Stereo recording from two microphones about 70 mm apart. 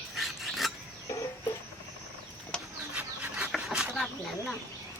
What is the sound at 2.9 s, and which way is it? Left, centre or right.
Bird, centre.